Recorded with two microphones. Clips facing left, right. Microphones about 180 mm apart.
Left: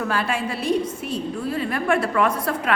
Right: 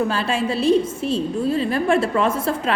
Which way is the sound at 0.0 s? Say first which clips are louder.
Right 3 dB; 25° right (ahead or behind).